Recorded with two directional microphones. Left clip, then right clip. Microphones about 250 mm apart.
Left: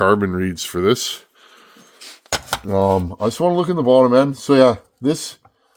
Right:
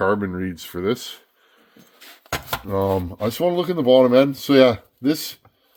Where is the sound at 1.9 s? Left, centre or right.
Left.